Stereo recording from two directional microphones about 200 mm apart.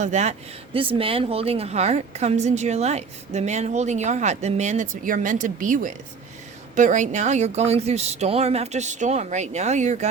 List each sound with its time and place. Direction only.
0.0 s speech: 35° right (ahead or behind)